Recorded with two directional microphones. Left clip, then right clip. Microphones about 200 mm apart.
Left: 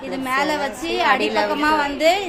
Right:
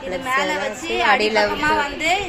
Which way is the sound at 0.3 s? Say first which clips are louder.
Even; 60° left (ahead or behind).